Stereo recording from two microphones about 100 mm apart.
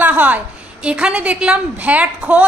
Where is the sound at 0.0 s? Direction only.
15° right (ahead or behind).